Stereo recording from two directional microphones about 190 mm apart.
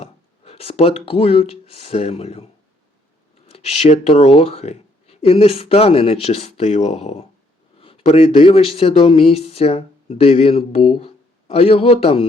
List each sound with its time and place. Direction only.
0.0 s speech: 30° left (ahead or behind)